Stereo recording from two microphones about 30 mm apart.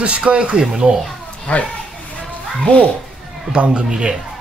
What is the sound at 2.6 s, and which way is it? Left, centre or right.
Speech, left.